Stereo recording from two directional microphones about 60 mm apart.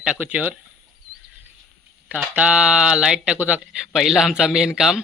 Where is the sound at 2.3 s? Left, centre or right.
Centre.